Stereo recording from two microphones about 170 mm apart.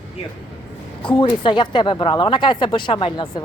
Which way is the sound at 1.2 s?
30° left (ahead or behind).